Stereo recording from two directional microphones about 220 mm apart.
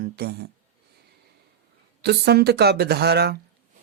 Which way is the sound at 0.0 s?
45° right (ahead or behind).